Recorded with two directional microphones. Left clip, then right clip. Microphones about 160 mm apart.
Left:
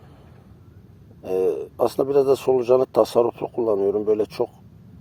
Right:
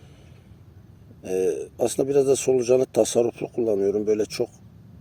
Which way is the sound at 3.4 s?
Centre (ahead or behind).